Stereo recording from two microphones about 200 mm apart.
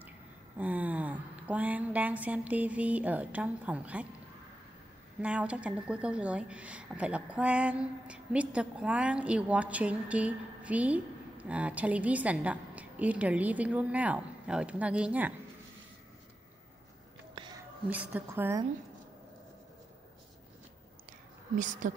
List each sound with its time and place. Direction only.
0.6 s speech: 10° right (ahead or behind)
5.2 s a woman's voice: 5° right (ahead or behind)
17.8 s a woman's voice: 5° right (ahead or behind)
21.8 s a woman's voice: 40° right (ahead or behind)